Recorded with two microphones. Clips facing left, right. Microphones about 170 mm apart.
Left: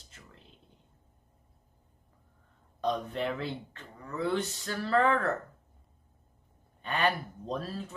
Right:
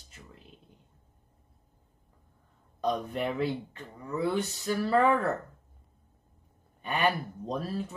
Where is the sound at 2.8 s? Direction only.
10° right (ahead or behind).